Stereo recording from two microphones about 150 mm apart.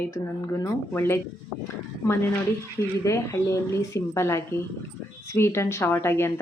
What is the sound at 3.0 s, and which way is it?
A woman's voice, 20° left (ahead or behind).